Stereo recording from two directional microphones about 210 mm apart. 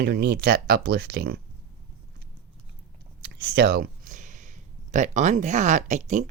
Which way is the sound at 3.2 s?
50° right (ahead or behind).